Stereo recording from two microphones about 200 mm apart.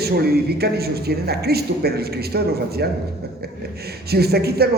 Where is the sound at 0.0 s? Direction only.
50° right (ahead or behind).